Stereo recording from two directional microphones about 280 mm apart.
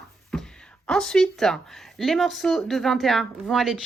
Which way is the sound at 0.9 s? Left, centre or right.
Centre.